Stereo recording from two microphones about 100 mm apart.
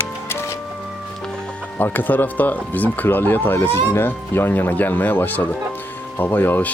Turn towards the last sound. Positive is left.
turn(degrees=20)  # may be behind; listen again after turning